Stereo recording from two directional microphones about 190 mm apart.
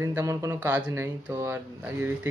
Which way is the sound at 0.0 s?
15° right (ahead or behind).